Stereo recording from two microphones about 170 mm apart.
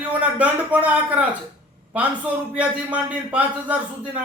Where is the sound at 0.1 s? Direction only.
10° right (ahead or behind).